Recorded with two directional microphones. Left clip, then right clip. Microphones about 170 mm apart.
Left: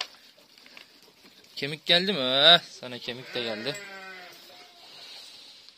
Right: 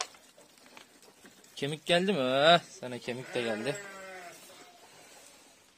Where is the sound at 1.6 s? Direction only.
10° right (ahead or behind).